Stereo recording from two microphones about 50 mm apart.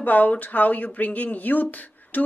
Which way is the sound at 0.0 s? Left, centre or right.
Left.